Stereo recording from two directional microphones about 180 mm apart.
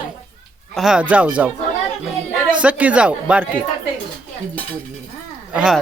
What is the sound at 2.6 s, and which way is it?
Speech, 10° right (ahead or behind).